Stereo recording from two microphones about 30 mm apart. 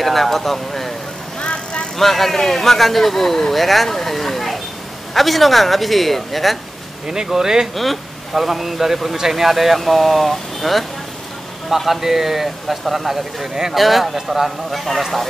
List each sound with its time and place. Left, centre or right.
0.0 s speech: centre
1.4 s vehicle: left
2.0 s a man's voice: centre
3.5 s speech: centre
7.2 s speech: centre
7.7 s speech: centre
14.7 s speech: centre